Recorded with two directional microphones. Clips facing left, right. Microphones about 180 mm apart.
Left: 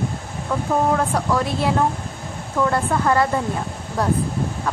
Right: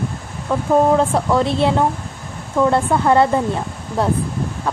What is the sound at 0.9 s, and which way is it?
Speech, 25° right (ahead or behind).